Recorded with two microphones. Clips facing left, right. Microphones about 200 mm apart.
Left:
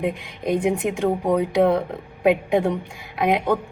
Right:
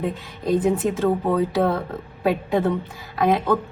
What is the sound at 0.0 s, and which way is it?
A woman's voice, 15° left (ahead or behind).